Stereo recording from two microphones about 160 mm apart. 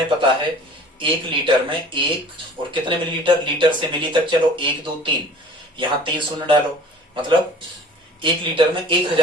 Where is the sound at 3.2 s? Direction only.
30° right (ahead or behind).